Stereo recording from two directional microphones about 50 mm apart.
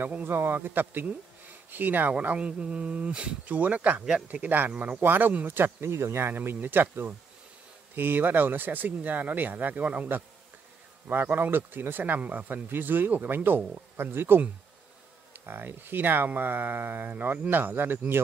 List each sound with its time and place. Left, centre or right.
0.0 s a man's voice: right
2.3 s speech: right
5.5 s speech: right
6.3 s a man's voice: right
11.1 s a man's voice: right
15.4 s a man's voice: right